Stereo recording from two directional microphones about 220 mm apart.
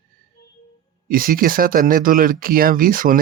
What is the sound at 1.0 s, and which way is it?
Speech, 40° right (ahead or behind).